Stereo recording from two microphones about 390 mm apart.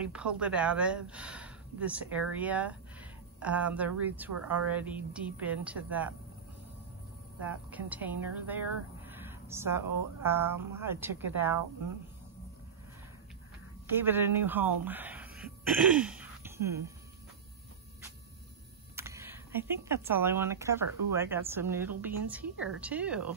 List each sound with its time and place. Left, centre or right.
0.0 s a woman's voice: centre
7.4 s speech: centre
13.8 s speech: centre
14.9 s throat clearing: centre
18.9 s speech: centre